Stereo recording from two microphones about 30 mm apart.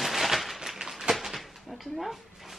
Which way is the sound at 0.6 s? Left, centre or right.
Centre.